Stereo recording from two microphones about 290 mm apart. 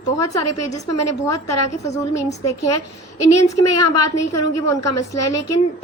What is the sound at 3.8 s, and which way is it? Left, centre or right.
A woman's voice, left.